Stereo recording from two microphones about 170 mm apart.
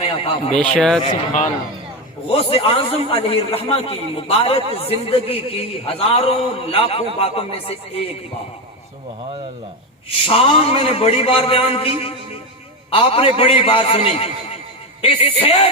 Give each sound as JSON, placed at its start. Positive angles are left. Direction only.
{"t": 0.0, "sound": "a man's voice", "side_deg": 35}
{"t": 0.5, "sound": "speech", "side_deg": 5}
{"t": 2.3, "sound": "a man's voice", "side_deg": 35}
{"t": 10.1, "sound": "a man's voice", "side_deg": 35}